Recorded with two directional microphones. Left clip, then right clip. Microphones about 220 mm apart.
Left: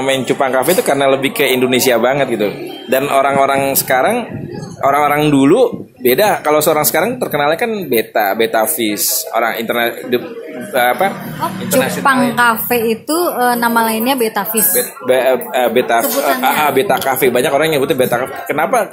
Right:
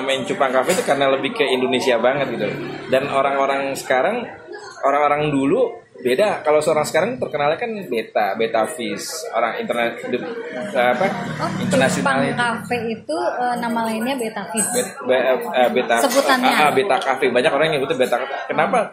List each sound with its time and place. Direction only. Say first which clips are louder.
0.0 s speech: left 5 dB; 45° left (ahead or behind)